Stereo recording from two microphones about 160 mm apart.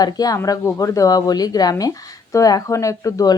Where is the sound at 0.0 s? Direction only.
25° left (ahead or behind).